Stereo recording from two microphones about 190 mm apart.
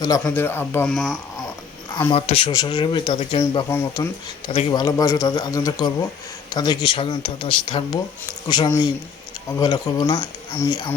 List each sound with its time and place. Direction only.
0.0 s speech: 20° left (ahead or behind); by 1.1 s centre (ahead or behind)
2.1 s speech: 30° left (ahead or behind)